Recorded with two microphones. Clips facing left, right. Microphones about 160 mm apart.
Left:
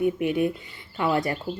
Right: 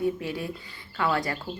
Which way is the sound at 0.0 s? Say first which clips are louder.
Left 6 dB; 20° left (ahead or behind).